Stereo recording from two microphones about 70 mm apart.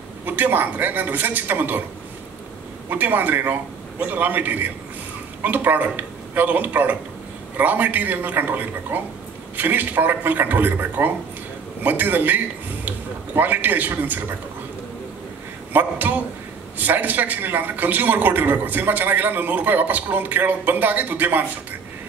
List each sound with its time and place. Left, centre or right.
0.2 s a man's voice: right
2.9 s a man's voice: right
15.7 s a man's voice: right